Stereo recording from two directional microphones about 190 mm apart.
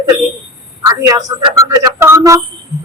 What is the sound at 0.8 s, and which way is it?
A man's voice, 20° right (ahead or behind).